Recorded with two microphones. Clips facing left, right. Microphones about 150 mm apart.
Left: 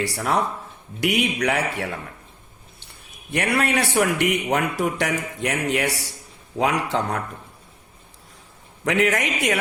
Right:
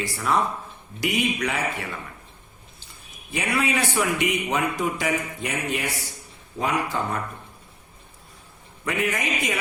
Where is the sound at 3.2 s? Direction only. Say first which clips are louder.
Left 3 dB; 65° left (ahead or behind); by 7.2 s 80° left.